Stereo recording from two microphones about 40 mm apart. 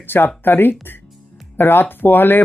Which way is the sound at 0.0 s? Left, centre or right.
Left.